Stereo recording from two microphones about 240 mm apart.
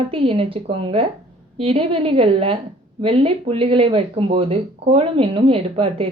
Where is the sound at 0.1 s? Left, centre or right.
Right.